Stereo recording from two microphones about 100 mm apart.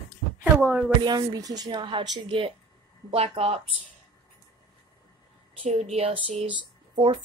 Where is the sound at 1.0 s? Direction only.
40° right (ahead or behind).